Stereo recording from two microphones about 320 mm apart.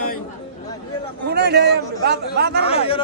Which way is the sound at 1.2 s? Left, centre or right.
Right.